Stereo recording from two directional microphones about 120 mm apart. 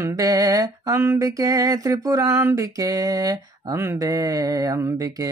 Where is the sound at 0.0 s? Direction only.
30° right (ahead or behind).